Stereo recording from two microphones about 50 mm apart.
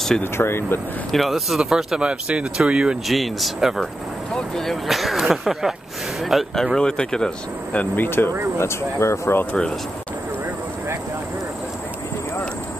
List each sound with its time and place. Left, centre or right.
0.2 s speech: left
1.1 s speech: centre
2.0 s speech: centre
3.1 s speech: centre
6.5 s speech: centre
7.7 s speech: left
8.5 s speech: left
9.5 s speech: left